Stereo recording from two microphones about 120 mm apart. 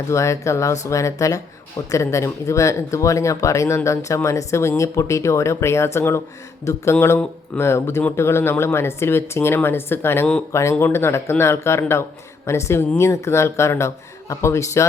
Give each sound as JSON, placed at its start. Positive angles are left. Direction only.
{"t": 0.1, "sound": "speech", "side_deg": 25}